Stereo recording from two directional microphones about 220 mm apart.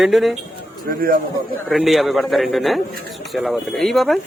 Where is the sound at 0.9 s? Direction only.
40° right (ahead or behind).